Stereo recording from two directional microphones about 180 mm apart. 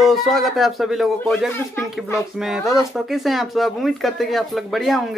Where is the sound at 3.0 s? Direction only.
Centre (ahead or behind).